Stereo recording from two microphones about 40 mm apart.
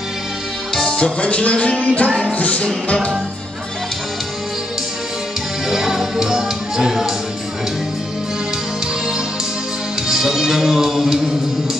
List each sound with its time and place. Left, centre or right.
0.7 s music: left
5.7 s music: centre
10.0 s music: centre